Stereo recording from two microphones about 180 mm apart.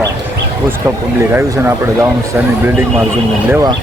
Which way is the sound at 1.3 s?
15° right (ahead or behind).